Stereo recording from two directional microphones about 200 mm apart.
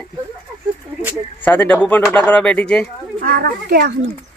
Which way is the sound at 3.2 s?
50° right (ahead or behind).